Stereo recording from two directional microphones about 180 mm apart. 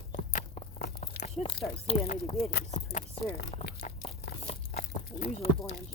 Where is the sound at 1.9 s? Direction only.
35° left (ahead or behind).